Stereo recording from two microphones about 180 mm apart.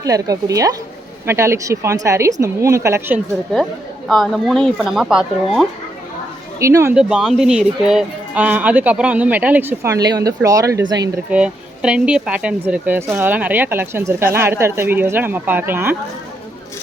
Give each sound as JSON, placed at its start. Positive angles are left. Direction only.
{"t": 0.0, "sound": "a woman's voice", "side_deg": -20}
{"t": 4.1, "sound": "speech", "side_deg": 0}
{"t": 6.6, "sound": "speech", "side_deg": -15}
{"t": 6.9, "sound": "speech", "side_deg": -5}
{"t": 11.3, "sound": "speech", "side_deg": -5}